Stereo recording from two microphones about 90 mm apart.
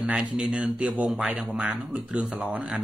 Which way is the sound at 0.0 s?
15° right (ahead or behind).